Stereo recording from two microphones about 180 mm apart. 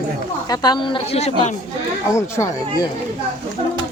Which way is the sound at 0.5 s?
25° left (ahead or behind).